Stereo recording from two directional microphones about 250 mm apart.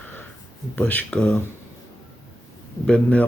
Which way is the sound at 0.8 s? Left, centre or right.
Centre.